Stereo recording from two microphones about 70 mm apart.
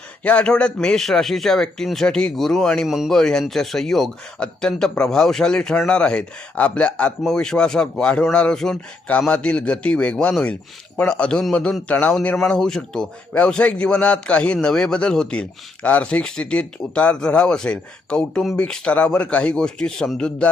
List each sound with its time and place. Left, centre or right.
0.3 s a man's voice: centre
2.8 s a man's voice: centre
3.1 s a man's voice: centre